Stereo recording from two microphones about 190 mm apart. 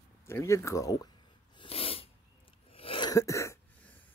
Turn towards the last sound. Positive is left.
turn(degrees=15)  # may be behind; listen again after turning